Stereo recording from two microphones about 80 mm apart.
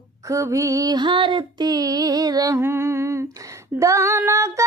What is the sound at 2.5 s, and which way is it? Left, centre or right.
Humming, right.